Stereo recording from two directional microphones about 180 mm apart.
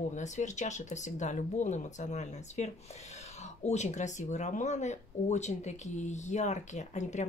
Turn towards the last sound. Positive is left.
turn(degrees=40)  # may be behind; listen again after turning